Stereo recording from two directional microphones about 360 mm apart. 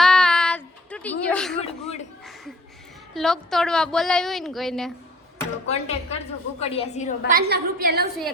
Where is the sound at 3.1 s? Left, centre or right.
Centre.